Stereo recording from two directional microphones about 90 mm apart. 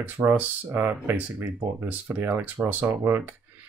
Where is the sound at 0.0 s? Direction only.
25° right (ahead or behind).